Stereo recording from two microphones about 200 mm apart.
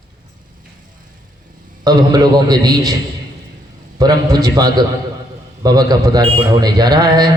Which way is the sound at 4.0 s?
20° right (ahead or behind).